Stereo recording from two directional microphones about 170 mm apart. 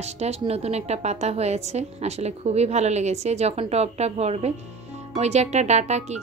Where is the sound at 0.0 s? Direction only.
40° right (ahead or behind).